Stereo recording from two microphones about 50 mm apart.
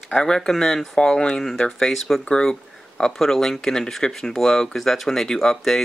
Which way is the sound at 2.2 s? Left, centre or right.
Centre.